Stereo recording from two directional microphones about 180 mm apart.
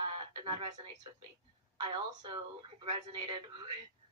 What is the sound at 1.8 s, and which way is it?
A woman's voice, 25° right (ahead or behind).